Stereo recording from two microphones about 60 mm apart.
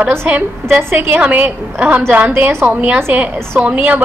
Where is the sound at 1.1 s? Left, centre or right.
Right.